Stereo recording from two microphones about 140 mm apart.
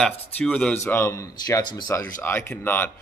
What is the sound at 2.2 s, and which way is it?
Speech, 15° left (ahead or behind).